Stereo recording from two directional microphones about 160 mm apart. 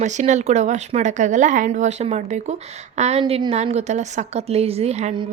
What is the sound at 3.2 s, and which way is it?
A woman's voice, 35° right (ahead or behind).